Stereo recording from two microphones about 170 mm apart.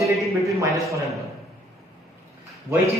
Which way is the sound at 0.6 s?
15° right (ahead or behind).